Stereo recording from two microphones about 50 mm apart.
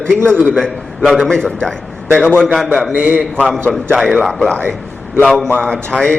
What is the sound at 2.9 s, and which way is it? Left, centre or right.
Speech, right.